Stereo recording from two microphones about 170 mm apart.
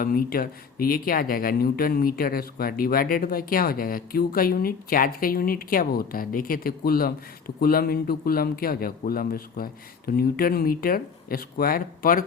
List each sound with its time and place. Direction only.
0.0 s speech: 60° left (ahead or behind)